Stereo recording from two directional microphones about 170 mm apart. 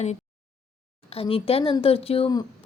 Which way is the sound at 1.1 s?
35° left (ahead or behind).